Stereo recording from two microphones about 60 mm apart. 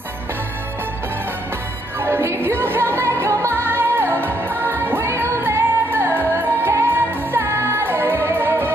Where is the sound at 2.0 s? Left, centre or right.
Right.